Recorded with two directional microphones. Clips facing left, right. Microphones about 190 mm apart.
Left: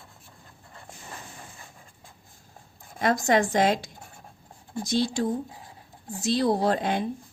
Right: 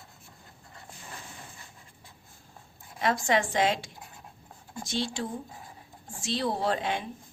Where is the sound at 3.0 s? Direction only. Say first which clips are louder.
Left 4 dB; 45° left (ahead or behind).